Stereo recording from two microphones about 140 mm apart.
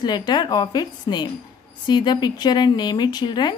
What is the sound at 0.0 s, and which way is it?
Speech, 30° left (ahead or behind).